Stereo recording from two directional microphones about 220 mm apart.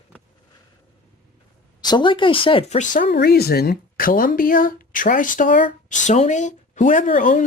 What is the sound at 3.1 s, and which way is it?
Speech, 45° left (ahead or behind).